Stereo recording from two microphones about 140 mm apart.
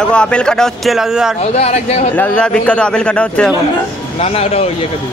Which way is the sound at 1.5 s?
50° left (ahead or behind).